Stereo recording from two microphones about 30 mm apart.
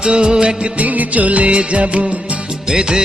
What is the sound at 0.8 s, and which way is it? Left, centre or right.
Music, right.